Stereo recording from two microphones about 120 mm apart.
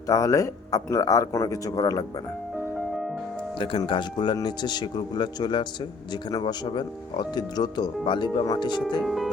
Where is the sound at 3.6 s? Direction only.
45° left (ahead or behind).